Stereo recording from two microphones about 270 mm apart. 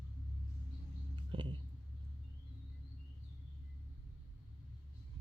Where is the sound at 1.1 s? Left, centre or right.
Centre.